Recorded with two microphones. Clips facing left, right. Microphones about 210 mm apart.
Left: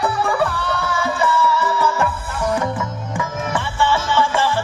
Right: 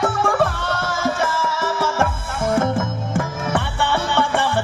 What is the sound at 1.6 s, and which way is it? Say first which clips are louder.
Music: left 1 dB; 90° right.